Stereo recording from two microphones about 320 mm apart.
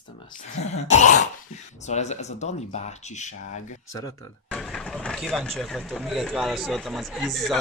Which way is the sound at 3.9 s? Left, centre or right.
Centre.